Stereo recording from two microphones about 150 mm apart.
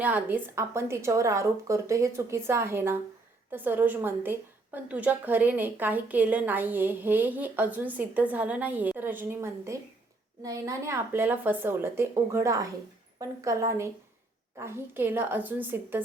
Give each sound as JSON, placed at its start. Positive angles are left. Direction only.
{"t": 0.0, "sound": "a woman's voice", "side_deg": -10}